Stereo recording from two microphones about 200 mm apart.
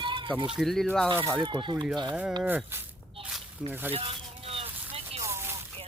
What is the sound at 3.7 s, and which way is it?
Speech, 10° right (ahead or behind).